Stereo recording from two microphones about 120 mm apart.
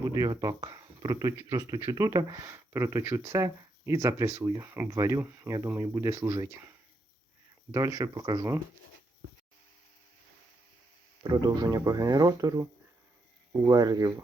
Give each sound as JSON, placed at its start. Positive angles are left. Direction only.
{"t": 0.0, "sound": "speech", "side_deg": -30}
{"t": 11.2, "sound": "speech", "side_deg": -40}